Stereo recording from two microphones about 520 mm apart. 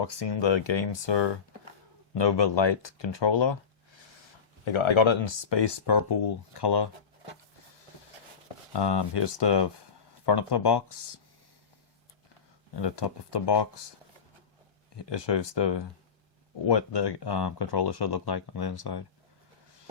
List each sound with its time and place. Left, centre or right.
0.0 s speech: left
4.6 s speech: left
8.7 s speech: left
12.7 s speech: left
14.9 s speech: left